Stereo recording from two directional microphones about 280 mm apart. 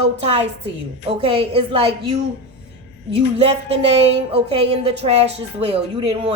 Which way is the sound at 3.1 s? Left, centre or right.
Right.